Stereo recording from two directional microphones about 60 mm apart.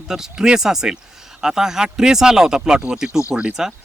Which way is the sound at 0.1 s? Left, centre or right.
Centre.